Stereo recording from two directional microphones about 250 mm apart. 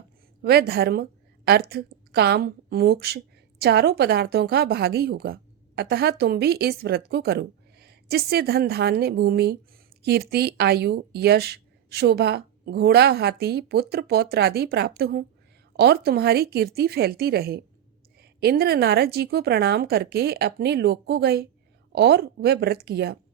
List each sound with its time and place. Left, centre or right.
0.4 s a woman's voice: right